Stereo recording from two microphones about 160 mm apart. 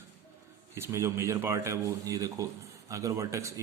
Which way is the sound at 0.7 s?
15° right (ahead or behind).